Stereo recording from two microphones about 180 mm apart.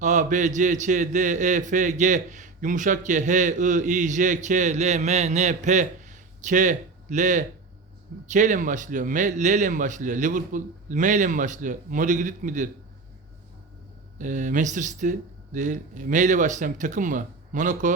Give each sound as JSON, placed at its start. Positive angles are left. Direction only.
{"t": 0.0, "sound": "a man's voice", "side_deg": -40}
{"t": 14.2, "sound": "a man's voice", "side_deg": -45}